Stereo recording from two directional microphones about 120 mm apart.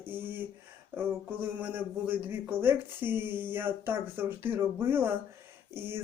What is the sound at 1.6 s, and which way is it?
Speech, 15° right (ahead or behind).